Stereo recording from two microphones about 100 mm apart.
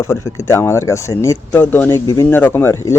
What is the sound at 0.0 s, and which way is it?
Speech, 30° left (ahead or behind).